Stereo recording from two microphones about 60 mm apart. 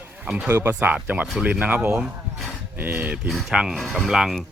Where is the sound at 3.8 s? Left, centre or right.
Centre.